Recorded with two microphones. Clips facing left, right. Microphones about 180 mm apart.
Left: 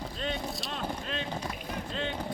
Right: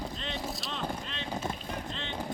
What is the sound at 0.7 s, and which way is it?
Vehicle, 45° left (ahead or behind).